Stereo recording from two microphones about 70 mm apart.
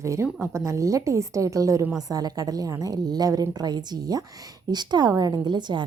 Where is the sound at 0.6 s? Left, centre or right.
Right.